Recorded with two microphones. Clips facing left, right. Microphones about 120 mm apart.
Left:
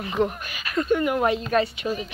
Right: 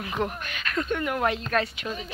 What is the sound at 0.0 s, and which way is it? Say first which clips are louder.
Speech: left 5 dB; centre (ahead or behind).